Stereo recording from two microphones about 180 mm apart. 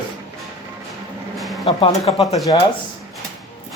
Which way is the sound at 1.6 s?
30° left (ahead or behind).